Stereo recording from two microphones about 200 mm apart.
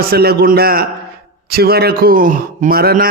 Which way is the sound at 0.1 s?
50° right (ahead or behind).